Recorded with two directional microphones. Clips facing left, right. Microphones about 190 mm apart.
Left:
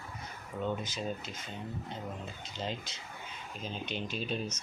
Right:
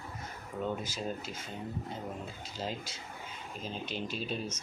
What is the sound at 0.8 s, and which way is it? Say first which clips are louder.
Speech: even; 5° right (ahead or behind).